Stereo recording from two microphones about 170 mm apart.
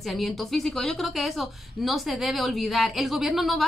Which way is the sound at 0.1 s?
Centre (ahead or behind).